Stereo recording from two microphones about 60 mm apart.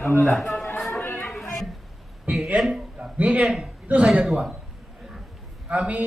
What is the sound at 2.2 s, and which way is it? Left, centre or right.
Speech, right.